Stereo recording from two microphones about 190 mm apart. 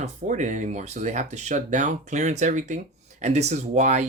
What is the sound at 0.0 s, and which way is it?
Speech, 40° right (ahead or behind).